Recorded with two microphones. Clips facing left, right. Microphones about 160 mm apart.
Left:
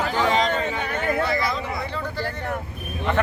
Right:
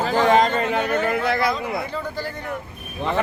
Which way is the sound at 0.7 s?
65° right (ahead or behind).